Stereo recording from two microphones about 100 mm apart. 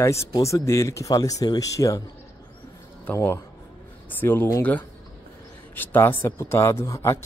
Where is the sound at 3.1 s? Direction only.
25° left (ahead or behind).